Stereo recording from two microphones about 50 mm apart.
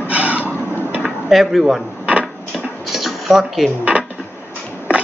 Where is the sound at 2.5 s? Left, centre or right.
Centre.